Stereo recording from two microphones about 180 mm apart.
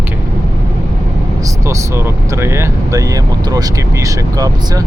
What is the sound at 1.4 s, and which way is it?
Speech, 15° right (ahead or behind).